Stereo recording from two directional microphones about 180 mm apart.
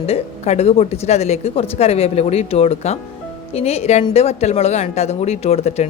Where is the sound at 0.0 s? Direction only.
35° left (ahead or behind).